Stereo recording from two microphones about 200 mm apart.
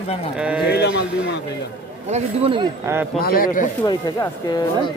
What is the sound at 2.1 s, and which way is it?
Speech, 30° right (ahead or behind).